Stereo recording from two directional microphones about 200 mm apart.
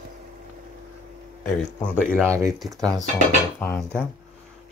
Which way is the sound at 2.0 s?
10° right (ahead or behind).